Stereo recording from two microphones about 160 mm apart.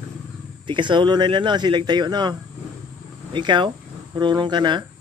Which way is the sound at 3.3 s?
30° right (ahead or behind).